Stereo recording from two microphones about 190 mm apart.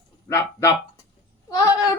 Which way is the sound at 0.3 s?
15° left (ahead or behind).